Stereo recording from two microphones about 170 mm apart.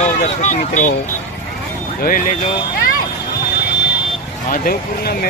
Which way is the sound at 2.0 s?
55° left (ahead or behind).